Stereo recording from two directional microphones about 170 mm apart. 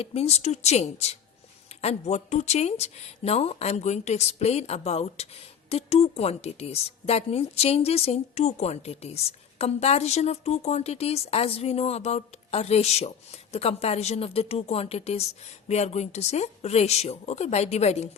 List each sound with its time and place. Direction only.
0.0 s speech: 35° left (ahead or behind)